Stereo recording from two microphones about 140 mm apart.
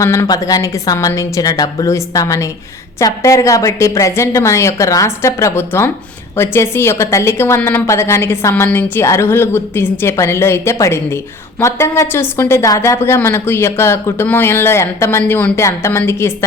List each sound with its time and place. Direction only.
0.0 s a woman's voice: 20° left (ahead or behind)